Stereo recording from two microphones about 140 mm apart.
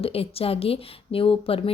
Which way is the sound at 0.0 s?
45° left (ahead or behind).